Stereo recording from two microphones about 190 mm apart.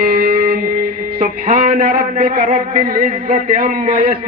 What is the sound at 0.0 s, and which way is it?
Music, 50° right (ahead or behind).